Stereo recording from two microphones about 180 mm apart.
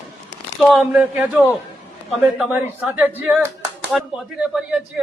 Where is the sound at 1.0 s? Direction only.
10° right (ahead or behind).